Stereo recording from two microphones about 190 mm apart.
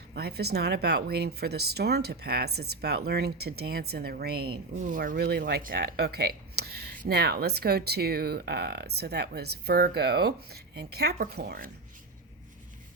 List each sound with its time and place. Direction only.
0.1 s speech: 55° right (ahead or behind)
4.8 s speech: 45° right (ahead or behind)